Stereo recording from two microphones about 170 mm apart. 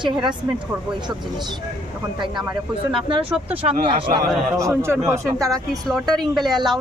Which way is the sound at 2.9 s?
30° right (ahead or behind).